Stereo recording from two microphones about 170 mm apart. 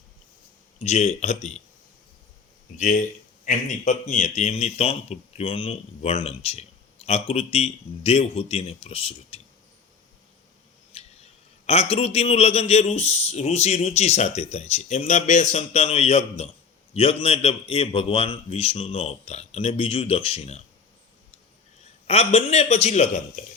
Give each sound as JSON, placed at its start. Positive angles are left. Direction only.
{"t": 0.8, "sound": "speech", "side_deg": 40}
{"t": 3.4, "sound": "a man's voice", "side_deg": 45}
{"t": 10.9, "sound": "a sound", "side_deg": 35}
{"t": 11.6, "sound": "speech", "side_deg": 35}
{"t": 22.0, "sound": "speech", "side_deg": 35}